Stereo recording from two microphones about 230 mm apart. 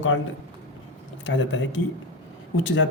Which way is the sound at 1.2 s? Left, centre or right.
Left.